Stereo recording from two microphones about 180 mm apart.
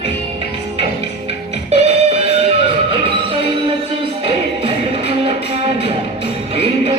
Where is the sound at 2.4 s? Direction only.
30° right (ahead or behind).